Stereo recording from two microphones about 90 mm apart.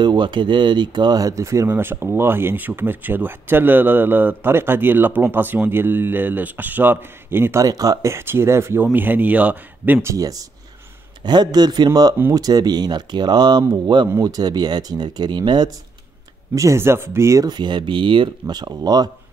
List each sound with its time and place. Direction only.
0.0 s speech: 55° right (ahead or behind); by 1.7 s 35° right (ahead or behind)
1.7 s speech: 25° right (ahead or behind)
7.6 s speech: 40° right (ahead or behind); by 9.9 s 15° right (ahead or behind)
10.0 s speech: 40° right (ahead or behind)
11.2 s speech: 50° right (ahead or behind)
16.5 s speech: 35° right (ahead or behind)
17.5 s speech: 55° right (ahead or behind)